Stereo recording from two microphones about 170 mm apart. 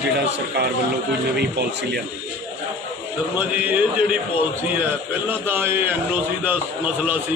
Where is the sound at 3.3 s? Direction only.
10° right (ahead or behind).